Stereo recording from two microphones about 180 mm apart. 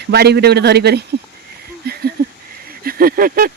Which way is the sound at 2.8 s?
55° right (ahead or behind).